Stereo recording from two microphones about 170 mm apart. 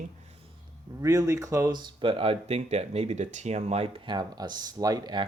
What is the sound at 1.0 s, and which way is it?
Speech, 20° right (ahead or behind).